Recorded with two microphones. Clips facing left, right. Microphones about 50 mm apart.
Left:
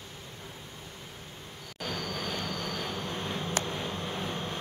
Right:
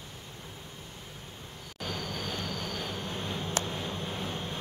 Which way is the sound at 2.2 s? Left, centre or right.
Left.